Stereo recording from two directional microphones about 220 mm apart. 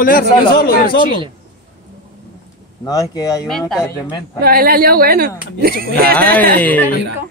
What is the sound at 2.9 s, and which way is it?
Speech, 15° left (ahead or behind).